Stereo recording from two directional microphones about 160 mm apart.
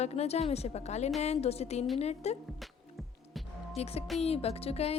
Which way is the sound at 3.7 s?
40° left (ahead or behind).